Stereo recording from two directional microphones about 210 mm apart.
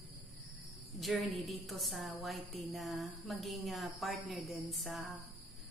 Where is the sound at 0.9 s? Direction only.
Centre (ahead or behind).